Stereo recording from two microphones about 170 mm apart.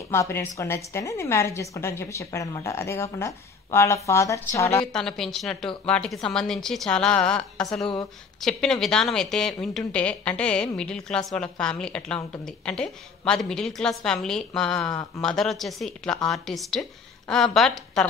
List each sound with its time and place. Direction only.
0.1 s a woman's voice: 15° left (ahead or behind)
4.9 s a woman's voice: 5° left (ahead or behind)